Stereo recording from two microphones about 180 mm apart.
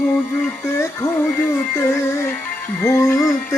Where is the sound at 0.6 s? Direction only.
15° left (ahead or behind).